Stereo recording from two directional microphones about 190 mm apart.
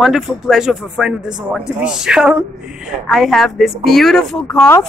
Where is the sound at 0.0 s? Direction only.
Centre (ahead or behind).